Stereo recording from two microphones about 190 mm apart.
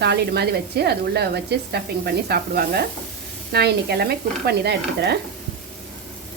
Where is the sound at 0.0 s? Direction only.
60° right (ahead or behind).